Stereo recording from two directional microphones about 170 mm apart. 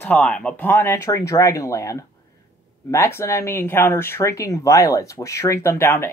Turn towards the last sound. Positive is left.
turn(degrees=15)  # may be behind; listen again after turning